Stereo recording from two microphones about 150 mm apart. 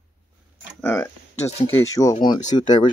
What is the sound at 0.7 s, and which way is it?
Speech, 15° left (ahead or behind).